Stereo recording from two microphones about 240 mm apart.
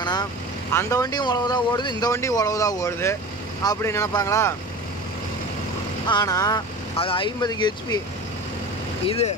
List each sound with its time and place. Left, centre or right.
0.0 s vehicle: centre
0.7 s speech: centre
6.0 s speech: centre
9.0 s speech: left